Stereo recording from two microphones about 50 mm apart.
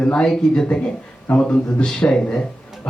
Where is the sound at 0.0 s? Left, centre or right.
Left.